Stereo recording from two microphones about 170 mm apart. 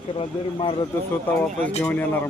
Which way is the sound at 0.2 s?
30° left (ahead or behind).